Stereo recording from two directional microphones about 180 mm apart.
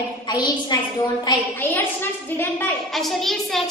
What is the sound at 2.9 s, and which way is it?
Speech, centre (ahead or behind).